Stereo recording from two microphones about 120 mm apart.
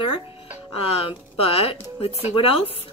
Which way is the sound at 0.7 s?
55° left (ahead or behind).